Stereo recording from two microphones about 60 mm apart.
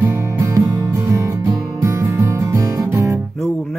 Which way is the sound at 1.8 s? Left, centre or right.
Right.